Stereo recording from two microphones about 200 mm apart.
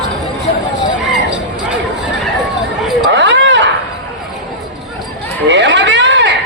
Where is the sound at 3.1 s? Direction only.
65° right (ahead or behind).